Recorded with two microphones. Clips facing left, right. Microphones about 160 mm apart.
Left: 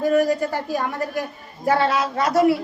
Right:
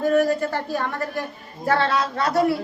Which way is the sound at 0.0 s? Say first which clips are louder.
Left 1 dB; 10° left (ahead or behind).